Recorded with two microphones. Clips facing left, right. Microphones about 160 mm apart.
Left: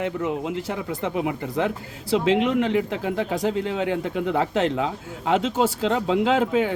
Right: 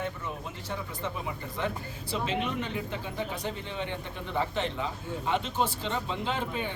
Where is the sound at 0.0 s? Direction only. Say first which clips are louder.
Left 10 dB; 90° left.